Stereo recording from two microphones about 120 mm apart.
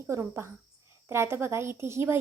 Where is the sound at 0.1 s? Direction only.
25° right (ahead or behind).